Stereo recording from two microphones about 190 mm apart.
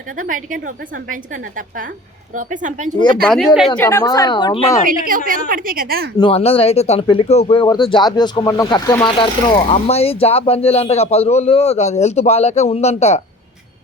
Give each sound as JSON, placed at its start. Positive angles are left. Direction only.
{"t": 0.2, "sound": "a woman's voice", "side_deg": -45}
{"t": 3.2, "sound": "speech", "side_deg": 0}
{"t": 3.8, "sound": "speech", "side_deg": 15}
{"t": 4.9, "sound": "a woman's voice", "side_deg": -45}
{"t": 6.1, "sound": "speech", "side_deg": 30}